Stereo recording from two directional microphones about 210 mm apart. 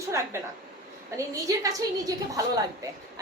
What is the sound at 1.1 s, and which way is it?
A woman's voice, 15° right (ahead or behind).